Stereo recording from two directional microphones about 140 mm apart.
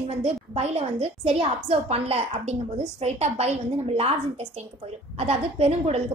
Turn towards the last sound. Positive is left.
turn(degrees=-50)  # may be behind; listen again after turning